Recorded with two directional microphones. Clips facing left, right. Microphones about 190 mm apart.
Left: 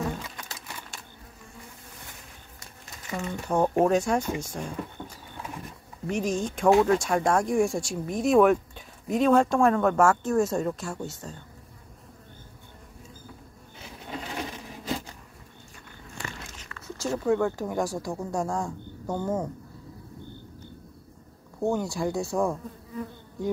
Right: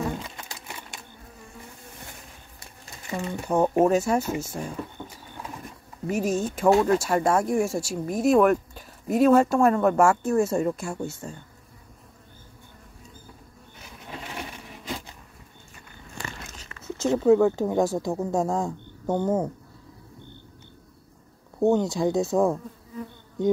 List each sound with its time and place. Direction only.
2.6 s typewriter: 20° right (ahead or behind)
3.8 s speech: 5° right (ahead or behind)
5.0 s pigeon: centre (ahead or behind)
6.0 s speech: 5° right (ahead or behind)
16.4 s speech: 20° right (ahead or behind)
21.5 s speech: 20° right (ahead or behind)